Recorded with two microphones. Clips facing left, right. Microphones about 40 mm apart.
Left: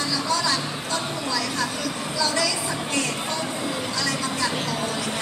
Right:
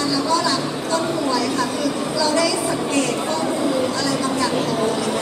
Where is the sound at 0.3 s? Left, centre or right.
Right.